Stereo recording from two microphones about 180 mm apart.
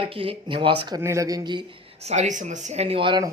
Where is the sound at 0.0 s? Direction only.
30° right (ahead or behind).